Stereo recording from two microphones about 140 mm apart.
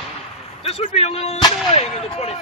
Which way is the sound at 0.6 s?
45° left (ahead or behind).